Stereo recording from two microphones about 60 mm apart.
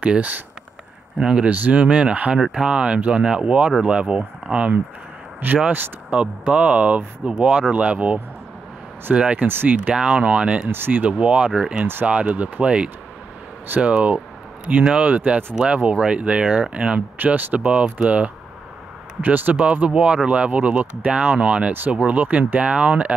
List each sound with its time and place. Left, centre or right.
1.1 s speech: centre
5.4 s speech: right
6.0 s speech: right
9.5 s speech: right
10.7 s speech: right
11.1 s speech: right